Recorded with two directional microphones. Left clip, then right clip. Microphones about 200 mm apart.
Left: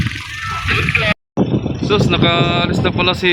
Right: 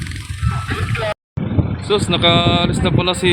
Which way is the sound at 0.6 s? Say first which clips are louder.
Left 7 dB; 20° left (ahead or behind).